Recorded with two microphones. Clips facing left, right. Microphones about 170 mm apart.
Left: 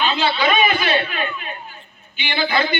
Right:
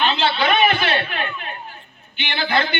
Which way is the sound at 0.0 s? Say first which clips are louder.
Even; 60° right (ahead or behind).